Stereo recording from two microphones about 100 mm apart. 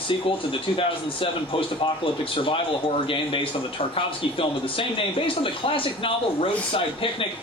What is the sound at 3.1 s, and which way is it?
Speech, 65° left (ahead or behind).